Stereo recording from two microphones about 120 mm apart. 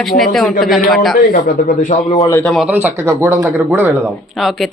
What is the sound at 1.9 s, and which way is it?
Speech, 80° left.